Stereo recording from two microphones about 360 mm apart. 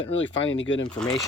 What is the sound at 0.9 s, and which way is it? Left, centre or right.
Speech, centre.